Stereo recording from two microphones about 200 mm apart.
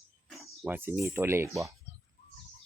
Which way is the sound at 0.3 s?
5° right (ahead or behind).